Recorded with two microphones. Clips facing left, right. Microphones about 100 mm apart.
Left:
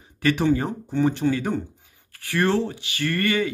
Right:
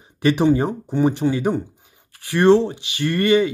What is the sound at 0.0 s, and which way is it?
A man's voice, 20° right (ahead or behind).